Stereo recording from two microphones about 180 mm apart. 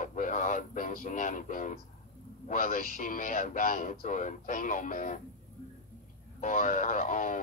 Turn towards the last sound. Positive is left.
turn(degrees=45)  # may be behind; listen again after turning